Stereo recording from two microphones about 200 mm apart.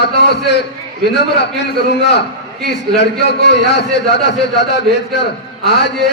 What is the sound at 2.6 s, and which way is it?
A man's voice, 60° left (ahead or behind).